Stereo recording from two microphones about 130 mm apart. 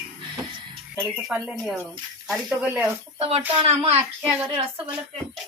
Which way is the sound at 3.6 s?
55° right (ahead or behind).